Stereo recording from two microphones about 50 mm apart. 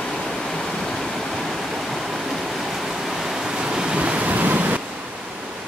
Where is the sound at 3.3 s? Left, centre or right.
Centre; by 4.8 s right.